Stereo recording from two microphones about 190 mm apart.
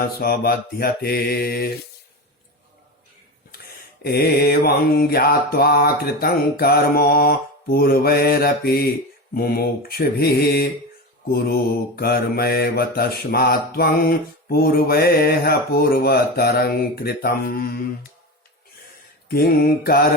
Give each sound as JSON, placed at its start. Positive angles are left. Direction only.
{"t": 0.2, "sound": "mantra", "side_deg": 50}
{"t": 4.0, "sound": "mantra", "side_deg": 55}
{"t": 11.9, "sound": "mantra", "side_deg": 50}
{"t": 19.3, "sound": "mantra", "side_deg": 50}